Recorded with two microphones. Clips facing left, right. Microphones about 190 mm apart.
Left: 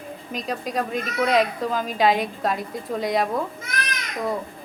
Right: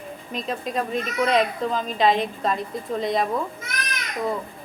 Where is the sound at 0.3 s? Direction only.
Centre (ahead or behind).